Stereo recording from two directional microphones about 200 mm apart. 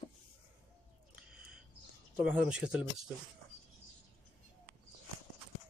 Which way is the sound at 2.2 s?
5° right (ahead or behind).